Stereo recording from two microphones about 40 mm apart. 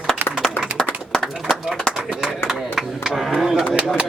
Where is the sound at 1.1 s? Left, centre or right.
Centre.